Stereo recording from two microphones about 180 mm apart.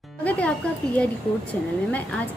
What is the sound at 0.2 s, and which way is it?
Music, 10° left (ahead or behind).